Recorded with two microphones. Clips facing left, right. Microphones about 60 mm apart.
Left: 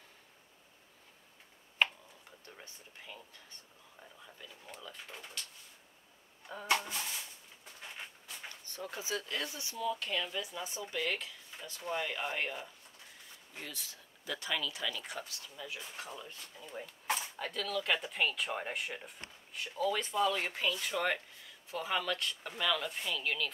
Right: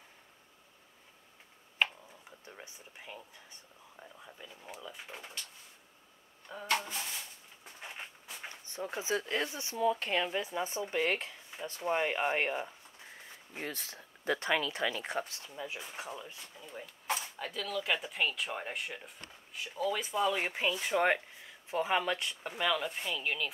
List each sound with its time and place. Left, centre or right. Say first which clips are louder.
1.8 s a sound: even; centre
2.4 s speech: right 3 dB; centre
6.4 s speech: even; centre
7.6 s a sound: right 2 dB; centre
8.6 s speech: right 5 dB; right
16.2 s speech: right 1 dB; centre